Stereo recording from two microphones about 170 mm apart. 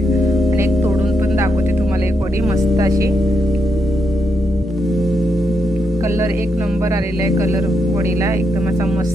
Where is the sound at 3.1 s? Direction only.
Centre (ahead or behind).